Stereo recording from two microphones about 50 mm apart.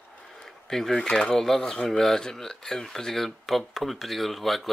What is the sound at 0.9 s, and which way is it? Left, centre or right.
Speech, centre.